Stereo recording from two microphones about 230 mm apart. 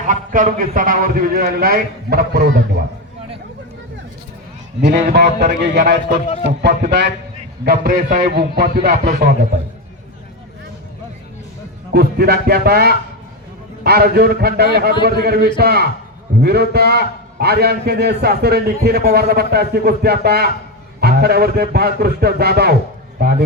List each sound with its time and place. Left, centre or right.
0.1 s a man's voice: right
5.1 s a man's voice: right
11.9 s a man's voice: right